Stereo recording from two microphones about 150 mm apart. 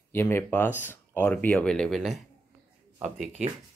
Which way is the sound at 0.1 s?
15° left (ahead or behind).